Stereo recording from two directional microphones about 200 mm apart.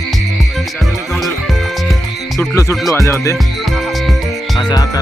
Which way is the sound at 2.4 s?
15° left (ahead or behind).